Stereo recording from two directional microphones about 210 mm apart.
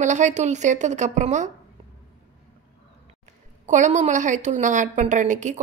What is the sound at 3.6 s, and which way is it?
A woman's voice, 35° right (ahead or behind).